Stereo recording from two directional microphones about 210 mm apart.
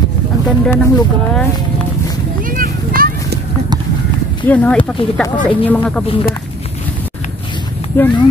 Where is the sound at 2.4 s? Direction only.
40° right (ahead or behind).